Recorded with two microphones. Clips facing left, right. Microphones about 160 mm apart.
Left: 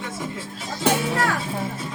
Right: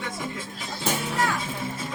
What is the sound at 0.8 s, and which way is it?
Music, 70° left (ahead or behind).